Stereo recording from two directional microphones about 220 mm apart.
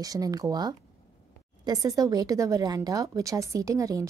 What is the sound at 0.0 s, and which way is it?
Speech, 15° right (ahead or behind).